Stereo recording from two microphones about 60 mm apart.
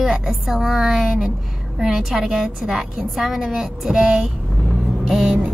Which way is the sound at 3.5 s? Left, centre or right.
Centre.